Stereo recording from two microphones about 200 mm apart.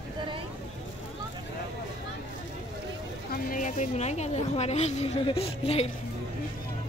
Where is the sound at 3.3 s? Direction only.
40° left (ahead or behind).